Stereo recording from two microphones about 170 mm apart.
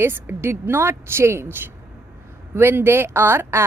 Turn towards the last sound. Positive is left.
turn(degrees=-15)  # may be behind; listen again after turning